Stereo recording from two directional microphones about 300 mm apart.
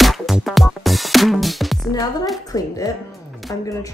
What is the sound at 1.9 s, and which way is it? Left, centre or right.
Music, centre.